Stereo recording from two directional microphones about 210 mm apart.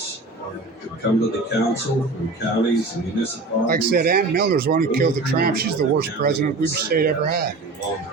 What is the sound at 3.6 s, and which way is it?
Speech, 45° right (ahead or behind).